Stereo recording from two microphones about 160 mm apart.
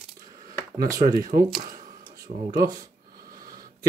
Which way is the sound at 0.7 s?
20° right (ahead or behind).